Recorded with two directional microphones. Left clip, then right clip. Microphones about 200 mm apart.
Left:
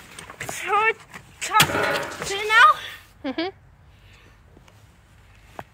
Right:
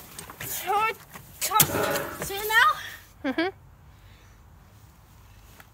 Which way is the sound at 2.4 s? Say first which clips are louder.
Left 6 dB; 30° right (ahead or behind).